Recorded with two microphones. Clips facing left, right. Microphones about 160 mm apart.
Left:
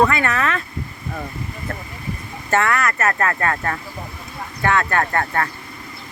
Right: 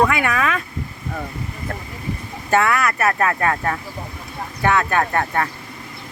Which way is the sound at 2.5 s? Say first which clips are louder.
Right 1 dB; 15° right (ahead or behind).